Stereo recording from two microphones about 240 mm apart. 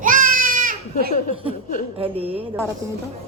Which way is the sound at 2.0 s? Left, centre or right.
Right.